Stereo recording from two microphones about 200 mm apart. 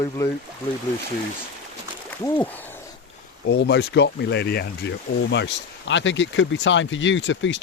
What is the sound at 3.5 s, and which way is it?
Speech, 60° left (ahead or behind).